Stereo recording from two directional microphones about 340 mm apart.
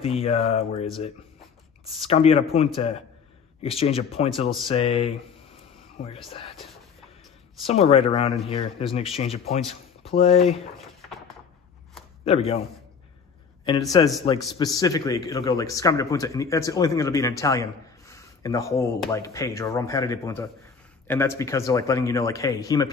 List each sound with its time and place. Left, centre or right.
0.0 s speech: centre
2.0 s speech: centre
6.5 s a sound: centre
7.6 s speech: centre
12.3 s speech: centre
14.2 s speech: centre